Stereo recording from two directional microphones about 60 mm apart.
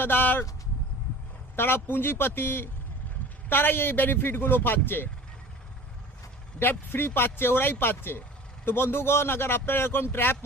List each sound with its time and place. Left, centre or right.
0.0 s a man's voice: left
1.5 s a man's voice: left
6.6 s a man's voice: left